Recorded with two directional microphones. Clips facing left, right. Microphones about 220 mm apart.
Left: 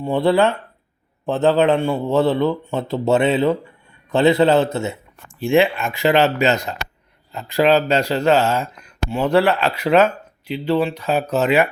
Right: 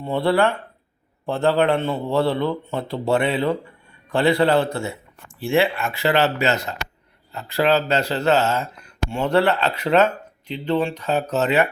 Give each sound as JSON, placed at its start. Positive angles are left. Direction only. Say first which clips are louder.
{"t": 0.0, "sound": "a man's voice", "louder": "left 3 dB", "side_deg": 15}